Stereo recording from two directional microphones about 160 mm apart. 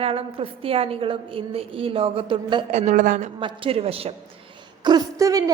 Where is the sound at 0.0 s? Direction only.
35° right (ahead or behind).